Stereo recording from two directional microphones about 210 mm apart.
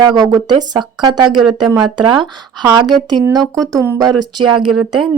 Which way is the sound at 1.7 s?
20° right (ahead or behind).